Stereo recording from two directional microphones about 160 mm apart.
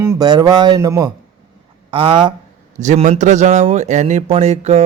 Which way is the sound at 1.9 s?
35° right (ahead or behind).